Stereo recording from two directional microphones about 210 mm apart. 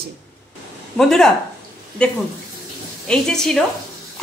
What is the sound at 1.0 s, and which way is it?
A woman's voice, centre (ahead or behind).